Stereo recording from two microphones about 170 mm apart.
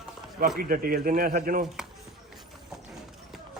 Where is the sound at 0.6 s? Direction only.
55° right (ahead or behind).